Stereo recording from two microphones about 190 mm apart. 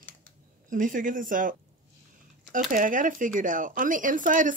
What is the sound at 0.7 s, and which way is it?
Speech, 45° right (ahead or behind).